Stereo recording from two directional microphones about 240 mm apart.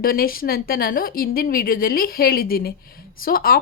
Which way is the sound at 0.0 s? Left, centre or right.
Left.